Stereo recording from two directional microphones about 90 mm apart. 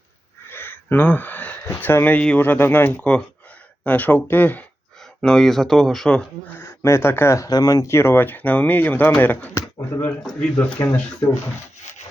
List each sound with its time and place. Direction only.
0.5 s a sound: 25° left (ahead or behind)
1.8 s speech: 20° left (ahead or behind)
5.2 s speech: 5° left (ahead or behind)
6.5 s speech: 25° left (ahead or behind)
7.5 s speech: 45° left (ahead or behind); by 10.2 s 20° left (ahead or behind)
10.2 s speech: 5° left (ahead or behind)